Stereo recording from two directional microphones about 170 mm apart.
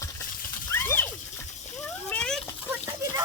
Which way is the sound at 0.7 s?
15° left (ahead or behind).